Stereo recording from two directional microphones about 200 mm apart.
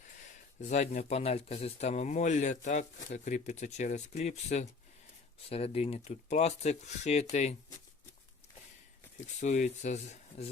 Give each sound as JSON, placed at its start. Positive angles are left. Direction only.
{"t": 0.6, "sound": "speech", "side_deg": 35}
{"t": 9.4, "sound": "speech", "side_deg": 35}